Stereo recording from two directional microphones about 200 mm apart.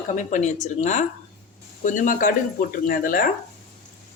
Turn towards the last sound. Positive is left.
turn(degrees=45)  # may be behind; listen again after turning